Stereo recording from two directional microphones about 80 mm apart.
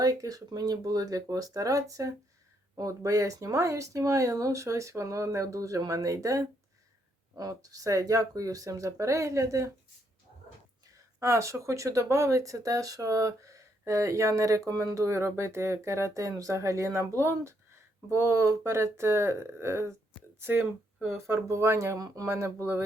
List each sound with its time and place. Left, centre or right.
0.0 s speech: right
11.2 s speech: right
21.9 s speech: right
22.3 s speech: right